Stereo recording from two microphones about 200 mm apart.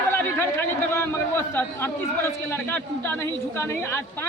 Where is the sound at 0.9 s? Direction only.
15° left (ahead or behind).